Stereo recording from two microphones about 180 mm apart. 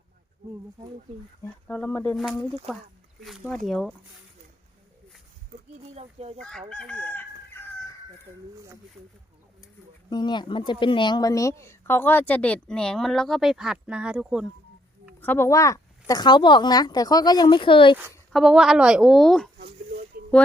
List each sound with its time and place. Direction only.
1.6 s a woman's voice: 10° left (ahead or behind)
3.2 s a woman's voice: centre (ahead or behind)
5.8 s speech: 35° right (ahead or behind)
6.7 s chicken: 5° left (ahead or behind)
10.1 s a woman's voice: 25° left (ahead or behind); by 14.5 s 5° right (ahead or behind)
15.2 s speech: 10° left (ahead or behind); by 17.9 s 30° left (ahead or behind)
18.3 s a woman's voice: centre (ahead or behind)
19.5 s a sound: 55° right (ahead or behind)